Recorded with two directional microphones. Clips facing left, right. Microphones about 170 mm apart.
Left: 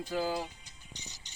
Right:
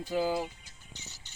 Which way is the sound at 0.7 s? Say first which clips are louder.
Even; 15° left (ahead or behind).